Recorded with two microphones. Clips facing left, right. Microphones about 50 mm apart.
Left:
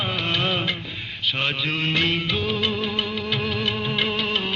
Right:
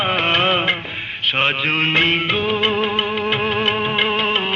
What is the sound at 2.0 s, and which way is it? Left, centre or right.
Music, right.